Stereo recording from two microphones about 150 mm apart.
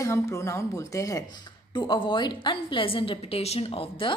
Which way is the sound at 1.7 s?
30° left (ahead or behind).